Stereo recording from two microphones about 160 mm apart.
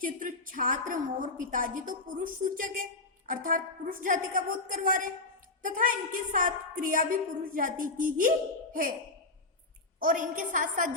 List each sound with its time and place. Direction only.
0.0 s a woman's voice: 55° right (ahead or behind)
10.0 s a woman's voice: 60° right (ahead or behind)